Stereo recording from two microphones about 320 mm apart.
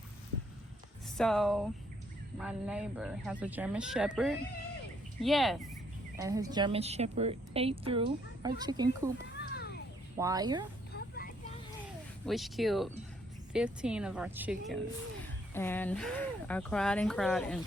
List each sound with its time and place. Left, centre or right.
1.1 s speech: centre
6.1 s a woman's voice: centre
9.4 s children playing: left
10.2 s a woman's voice: centre
12.2 s speech: centre